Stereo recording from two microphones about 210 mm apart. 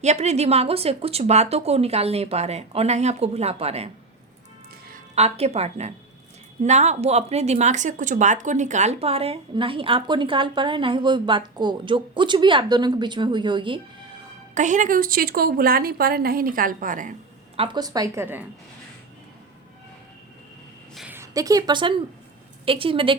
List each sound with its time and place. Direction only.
0.0 s a woman's voice: 30° right (ahead or behind)
14.5 s speech: 35° right (ahead or behind)
17.6 s a woman's voice: 20° right (ahead or behind)
20.9 s a woman's voice: 5° right (ahead or behind); by 23.1 s 25° right (ahead or behind)